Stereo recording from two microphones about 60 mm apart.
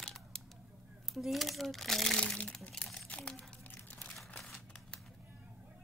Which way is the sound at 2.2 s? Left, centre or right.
Centre.